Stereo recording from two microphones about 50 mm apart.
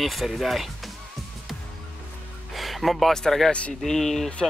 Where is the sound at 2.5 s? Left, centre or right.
Centre.